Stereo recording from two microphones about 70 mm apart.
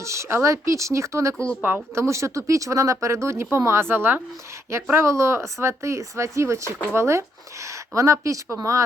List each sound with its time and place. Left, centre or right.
0.0 s speech: right